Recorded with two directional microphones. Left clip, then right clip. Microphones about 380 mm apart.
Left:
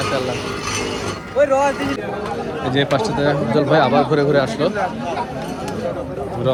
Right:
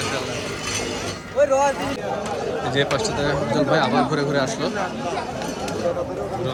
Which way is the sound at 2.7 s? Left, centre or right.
Centre.